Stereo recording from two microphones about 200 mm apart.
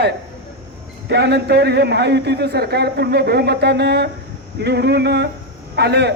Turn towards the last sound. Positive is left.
turn(degrees=-60)  # may be behind; listen again after turning